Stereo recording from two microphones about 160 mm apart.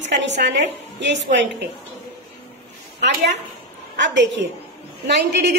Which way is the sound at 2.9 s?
90° right.